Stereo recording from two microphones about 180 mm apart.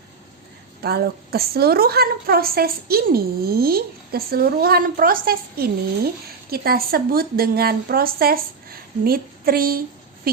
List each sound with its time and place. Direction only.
0.8 s a woman's voice: 60° right (ahead or behind)